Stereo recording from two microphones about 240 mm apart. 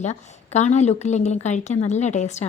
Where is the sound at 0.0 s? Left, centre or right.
Left.